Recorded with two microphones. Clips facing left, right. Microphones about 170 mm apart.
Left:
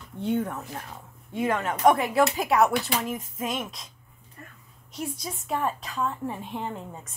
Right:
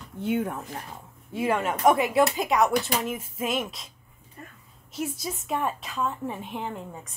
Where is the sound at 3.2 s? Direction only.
25° right (ahead or behind).